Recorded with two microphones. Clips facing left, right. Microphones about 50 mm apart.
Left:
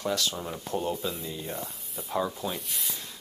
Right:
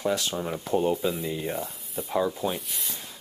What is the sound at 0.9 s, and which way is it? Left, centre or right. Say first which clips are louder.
Speech: right 6 dB; centre.